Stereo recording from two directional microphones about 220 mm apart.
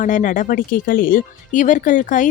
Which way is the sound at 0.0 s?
35° left (ahead or behind).